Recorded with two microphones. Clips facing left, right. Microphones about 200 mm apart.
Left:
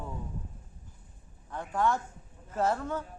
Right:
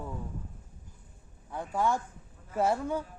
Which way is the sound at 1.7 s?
10° right (ahead or behind).